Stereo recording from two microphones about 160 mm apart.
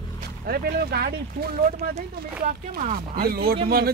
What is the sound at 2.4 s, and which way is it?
Speech, 55° right (ahead or behind).